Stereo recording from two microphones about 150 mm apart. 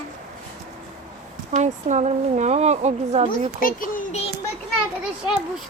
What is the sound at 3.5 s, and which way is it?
Speech, 65° left (ahead or behind).